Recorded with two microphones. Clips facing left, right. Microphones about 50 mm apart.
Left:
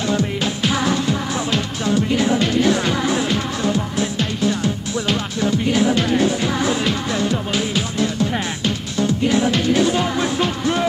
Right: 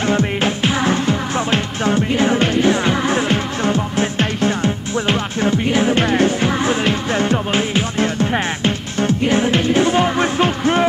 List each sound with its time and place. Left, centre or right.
0.0 s music: right